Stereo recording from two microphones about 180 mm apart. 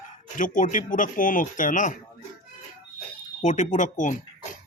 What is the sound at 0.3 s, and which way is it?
Speech, 45° left (ahead or behind).